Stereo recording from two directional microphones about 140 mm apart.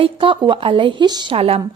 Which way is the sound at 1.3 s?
45° right (ahead or behind).